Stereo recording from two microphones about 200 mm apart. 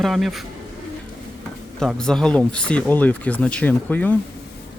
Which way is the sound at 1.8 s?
5° left (ahead or behind).